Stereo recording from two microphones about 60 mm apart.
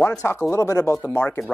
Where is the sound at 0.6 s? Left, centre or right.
Left.